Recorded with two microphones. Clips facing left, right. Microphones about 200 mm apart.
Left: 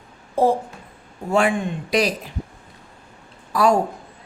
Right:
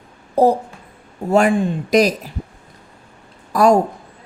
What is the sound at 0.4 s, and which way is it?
Speech, 40° right (ahead or behind).